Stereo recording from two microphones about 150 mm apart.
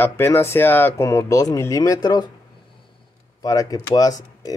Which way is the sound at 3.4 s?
25° left (ahead or behind).